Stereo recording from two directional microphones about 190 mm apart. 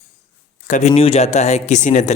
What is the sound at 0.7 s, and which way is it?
A man's voice, 35° left (ahead or behind).